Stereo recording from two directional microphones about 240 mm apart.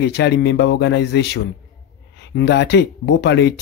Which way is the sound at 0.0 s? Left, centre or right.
Left.